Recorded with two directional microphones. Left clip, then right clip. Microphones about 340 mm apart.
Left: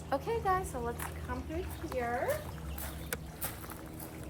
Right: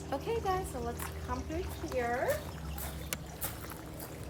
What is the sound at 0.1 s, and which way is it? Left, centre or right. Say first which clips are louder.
Speech: left 2 dB; centre.